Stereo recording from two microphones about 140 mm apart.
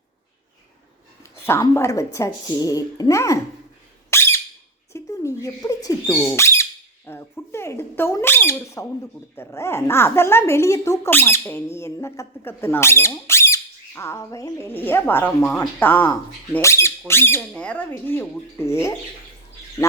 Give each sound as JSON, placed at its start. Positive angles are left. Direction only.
{"t": 1.2, "sound": "a woman's voice", "side_deg": 20}
{"t": 4.1, "sound": "squeak", "side_deg": 20}
{"t": 4.9, "sound": "a sound", "side_deg": 20}
{"t": 6.1, "sound": "a woman's voice", "side_deg": 20}